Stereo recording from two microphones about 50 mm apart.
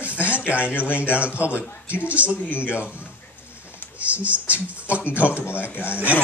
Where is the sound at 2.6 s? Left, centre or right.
Left.